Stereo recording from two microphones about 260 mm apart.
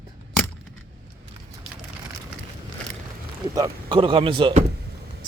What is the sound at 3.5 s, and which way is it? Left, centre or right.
Speech, centre.